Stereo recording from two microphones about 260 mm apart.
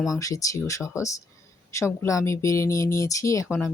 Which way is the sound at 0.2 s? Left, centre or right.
Centre.